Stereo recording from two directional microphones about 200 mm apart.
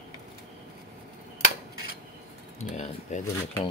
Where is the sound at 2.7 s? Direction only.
35° left (ahead or behind).